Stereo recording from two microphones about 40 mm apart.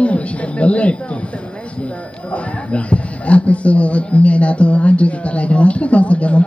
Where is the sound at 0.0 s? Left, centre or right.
Left.